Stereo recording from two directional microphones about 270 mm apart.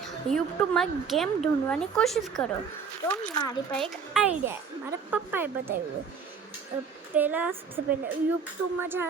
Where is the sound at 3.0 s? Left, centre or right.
Centre.